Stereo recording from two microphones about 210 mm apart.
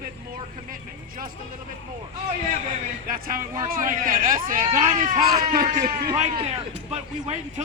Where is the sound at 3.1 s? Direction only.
45° right (ahead or behind).